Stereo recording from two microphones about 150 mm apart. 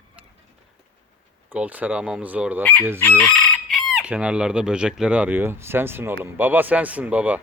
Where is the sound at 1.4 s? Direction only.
10° right (ahead or behind).